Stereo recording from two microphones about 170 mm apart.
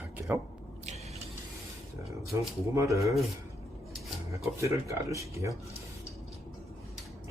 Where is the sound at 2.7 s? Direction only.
20° right (ahead or behind).